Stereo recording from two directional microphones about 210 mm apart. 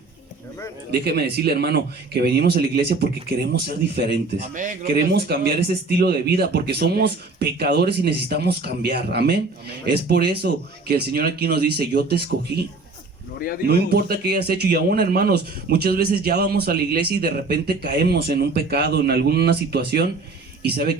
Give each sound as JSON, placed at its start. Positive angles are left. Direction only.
{"t": 0.9, "sound": "a man's voice", "side_deg": -50}
{"t": 13.7, "sound": "a man's voice", "side_deg": -50}